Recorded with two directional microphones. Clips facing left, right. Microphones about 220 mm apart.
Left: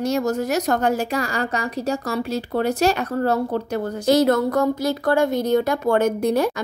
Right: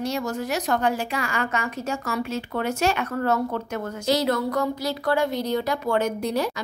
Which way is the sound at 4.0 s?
50° left (ahead or behind).